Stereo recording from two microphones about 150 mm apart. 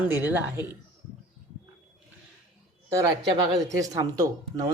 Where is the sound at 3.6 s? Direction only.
20° right (ahead or behind).